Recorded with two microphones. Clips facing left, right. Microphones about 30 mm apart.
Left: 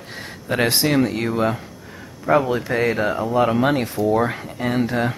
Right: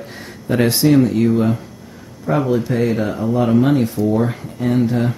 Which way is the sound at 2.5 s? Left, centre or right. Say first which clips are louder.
Right 3 dB; left.